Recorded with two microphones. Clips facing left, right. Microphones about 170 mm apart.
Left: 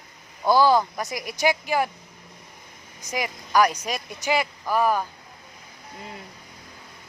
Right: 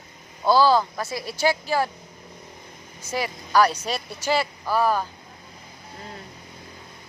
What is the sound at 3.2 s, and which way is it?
Speech, 15° left (ahead or behind).